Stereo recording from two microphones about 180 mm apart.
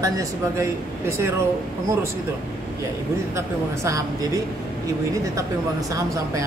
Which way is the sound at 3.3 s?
15° right (ahead or behind).